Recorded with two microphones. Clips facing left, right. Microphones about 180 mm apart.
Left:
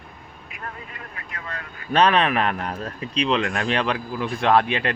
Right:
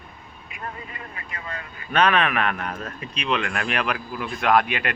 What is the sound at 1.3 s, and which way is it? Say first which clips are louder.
Vehicle: even; centre (ahead or behind).